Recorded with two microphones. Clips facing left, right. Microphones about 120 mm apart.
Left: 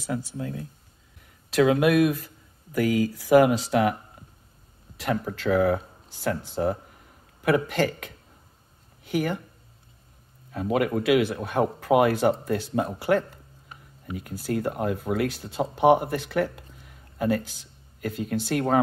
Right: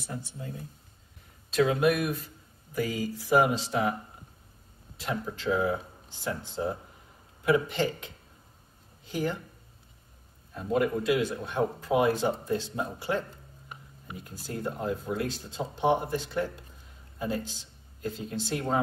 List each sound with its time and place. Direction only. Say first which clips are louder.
0.0 s speech: left 8 dB; 90° left
1.5 s speech: left 4 dB; 80° left
4.9 s speech: left 6 dB; 75° left (ahead or behind)
9.0 s speech: left 5 dB; 70° left (ahead or behind)
10.5 s speech: left 3 dB; 80° left